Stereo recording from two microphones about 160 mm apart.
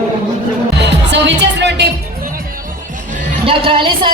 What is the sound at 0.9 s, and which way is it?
Music, 90° right.